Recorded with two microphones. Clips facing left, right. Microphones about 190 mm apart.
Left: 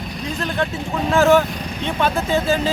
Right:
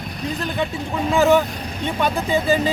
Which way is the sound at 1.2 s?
15° right (ahead or behind).